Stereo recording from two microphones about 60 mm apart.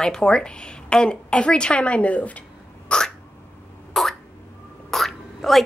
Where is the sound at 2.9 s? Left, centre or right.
Centre.